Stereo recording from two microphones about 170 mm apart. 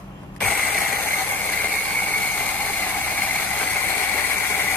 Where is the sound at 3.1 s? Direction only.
10° left (ahead or behind).